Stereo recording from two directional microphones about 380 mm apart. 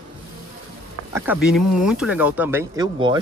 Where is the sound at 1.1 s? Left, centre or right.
Centre.